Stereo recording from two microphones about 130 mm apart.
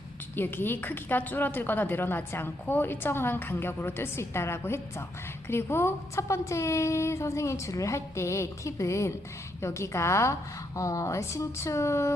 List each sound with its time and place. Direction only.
0.3 s a woman's voice: 15° left (ahead or behind)